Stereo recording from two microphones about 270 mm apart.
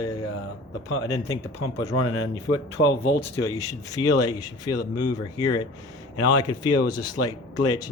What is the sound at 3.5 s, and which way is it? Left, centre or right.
Speech, centre.